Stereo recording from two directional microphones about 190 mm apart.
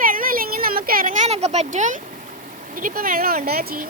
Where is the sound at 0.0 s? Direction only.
50° right (ahead or behind).